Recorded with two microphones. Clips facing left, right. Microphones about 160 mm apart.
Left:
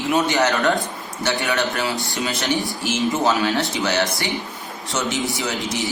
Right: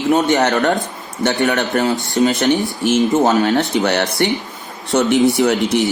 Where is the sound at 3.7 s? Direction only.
60° right (ahead or behind).